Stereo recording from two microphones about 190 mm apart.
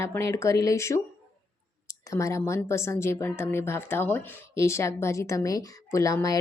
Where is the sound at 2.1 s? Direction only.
15° left (ahead or behind).